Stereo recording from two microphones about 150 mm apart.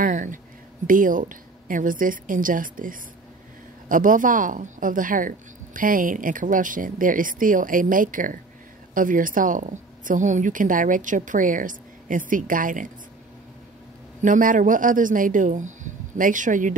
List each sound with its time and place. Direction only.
0.0 s a woman's voice: 60° right (ahead or behind)
14.2 s a woman's voice: 60° right (ahead or behind)